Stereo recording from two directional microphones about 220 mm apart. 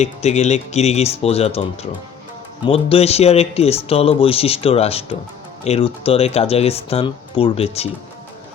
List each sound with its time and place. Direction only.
0.0 s speech: 30° left (ahead or behind)